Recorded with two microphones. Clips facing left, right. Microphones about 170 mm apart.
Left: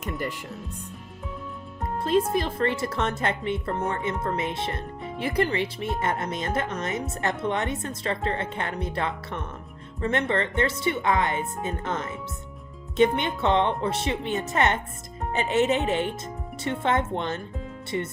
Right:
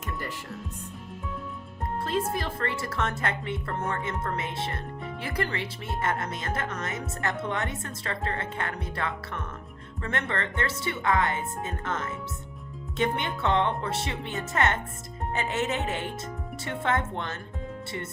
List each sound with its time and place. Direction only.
0.0 s speech: 15° left (ahead or behind)
2.0 s speech: 20° left (ahead or behind)